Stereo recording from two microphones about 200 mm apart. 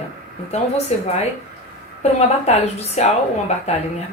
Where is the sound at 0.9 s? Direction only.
30° left (ahead or behind).